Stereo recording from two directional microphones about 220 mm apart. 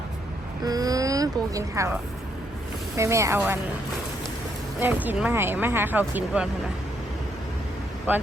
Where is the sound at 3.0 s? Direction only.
15° right (ahead or behind).